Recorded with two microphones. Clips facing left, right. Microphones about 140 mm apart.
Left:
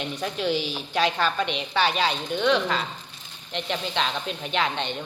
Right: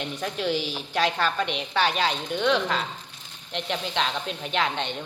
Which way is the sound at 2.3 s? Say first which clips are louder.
Left 1 dB; 5° right (ahead or behind).